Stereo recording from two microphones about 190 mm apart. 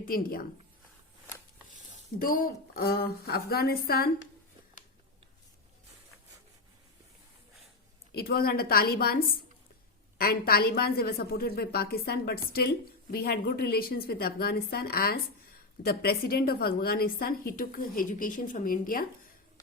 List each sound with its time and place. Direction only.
0.0 s a woman's voice: 50° left (ahead or behind)
2.1 s a woman's voice: 45° left (ahead or behind)
8.1 s a woman's voice: 55° left (ahead or behind)
10.2 s a woman's voice: 50° left (ahead or behind)